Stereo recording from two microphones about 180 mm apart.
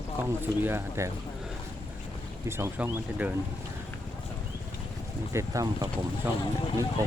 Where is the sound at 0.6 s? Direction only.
15° right (ahead or behind).